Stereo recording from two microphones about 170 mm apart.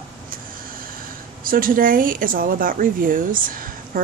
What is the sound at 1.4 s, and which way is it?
Speech, 55° right (ahead or behind).